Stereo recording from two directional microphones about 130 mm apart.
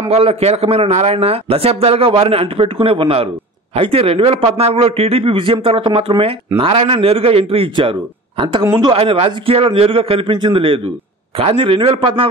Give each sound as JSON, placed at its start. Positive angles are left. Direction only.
{"t": 0.1, "sound": "a man's voice", "side_deg": -50}